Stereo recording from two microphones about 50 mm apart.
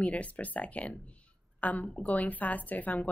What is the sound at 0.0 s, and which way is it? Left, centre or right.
A woman's voice, left.